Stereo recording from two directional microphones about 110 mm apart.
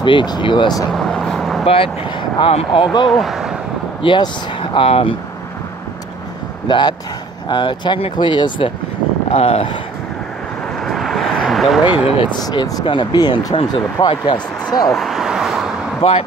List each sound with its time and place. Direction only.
0.0 s speech: 45° left (ahead or behind)
0.9 s vehicle: 5° left (ahead or behind)
1.6 s speech: 55° left (ahead or behind)
3.1 s speech: centre (ahead or behind)
4.0 s speech: 50° left (ahead or behind)
6.7 s speech: 40° left (ahead or behind)
9.3 s speech: 65° left (ahead or behind)
10.9 s vehicle: centre (ahead or behind)
11.8 s speech: 40° left (ahead or behind)
12.8 s speech: 45° left (ahead or behind)
14.9 s vehicle: centre (ahead or behind)
16.0 s speech: 70° left (ahead or behind)